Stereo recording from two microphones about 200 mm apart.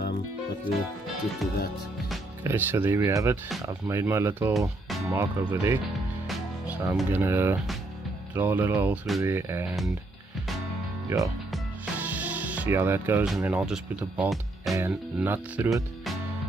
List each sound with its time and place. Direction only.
2.4 s speech: 10° right (ahead or behind)
6.2 s music: 10° right (ahead or behind)
8.4 s speech: 10° right (ahead or behind)
11.1 s speech: 15° right (ahead or behind)
11.5 s music: 5° right (ahead or behind)
14.8 s speech: 10° right (ahead or behind)